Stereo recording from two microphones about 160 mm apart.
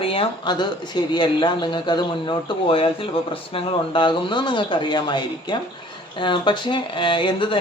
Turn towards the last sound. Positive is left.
turn(degrees=30)  # may be behind; listen again after turning